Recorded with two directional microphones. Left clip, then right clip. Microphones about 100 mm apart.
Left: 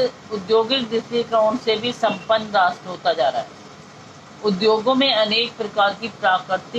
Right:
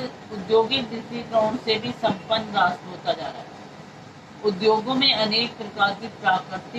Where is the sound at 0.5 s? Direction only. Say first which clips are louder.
Left 2 dB; 25° left (ahead or behind).